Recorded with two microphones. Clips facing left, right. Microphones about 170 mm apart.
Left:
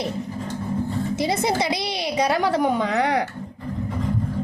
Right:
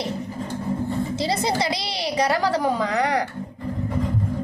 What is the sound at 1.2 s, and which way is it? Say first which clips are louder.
A woman's voice: left 2 dB; 20° left (ahead or behind).